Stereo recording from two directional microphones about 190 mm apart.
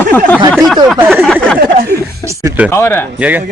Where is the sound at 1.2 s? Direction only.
5° left (ahead or behind).